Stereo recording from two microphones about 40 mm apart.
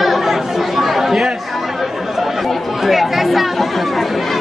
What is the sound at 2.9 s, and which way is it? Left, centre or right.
Speech, centre.